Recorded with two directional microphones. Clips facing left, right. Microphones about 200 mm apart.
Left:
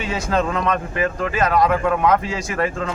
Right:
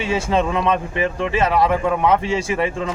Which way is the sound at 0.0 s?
30° right (ahead or behind).